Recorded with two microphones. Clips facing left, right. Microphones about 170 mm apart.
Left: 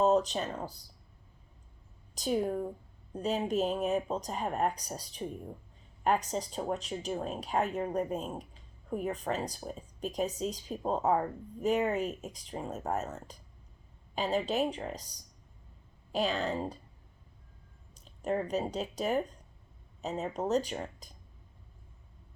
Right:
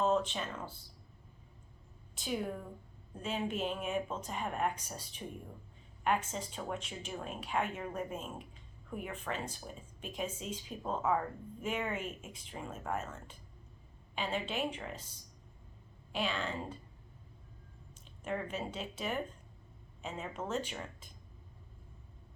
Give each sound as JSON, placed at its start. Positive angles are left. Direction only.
{"t": 0.0, "sound": "speech", "side_deg": 40}
{"t": 2.1, "sound": "speech", "side_deg": 40}
{"t": 17.9, "sound": "speech", "side_deg": 35}